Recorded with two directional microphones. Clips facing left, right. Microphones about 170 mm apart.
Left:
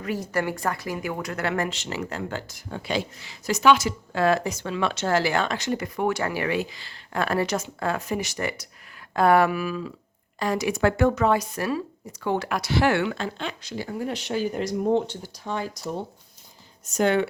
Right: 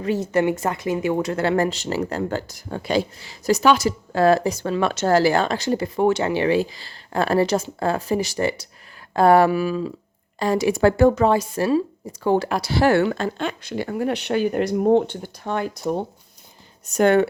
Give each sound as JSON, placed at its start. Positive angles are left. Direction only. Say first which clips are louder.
{"t": 0.0, "sound": "a woman's voice", "louder": "right 7 dB", "side_deg": -25}